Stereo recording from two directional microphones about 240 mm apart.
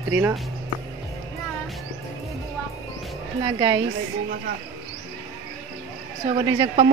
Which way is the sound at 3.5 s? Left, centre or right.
Centre.